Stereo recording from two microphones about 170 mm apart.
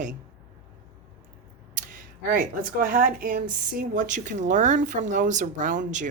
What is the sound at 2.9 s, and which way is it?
Speech, 50° right (ahead or behind).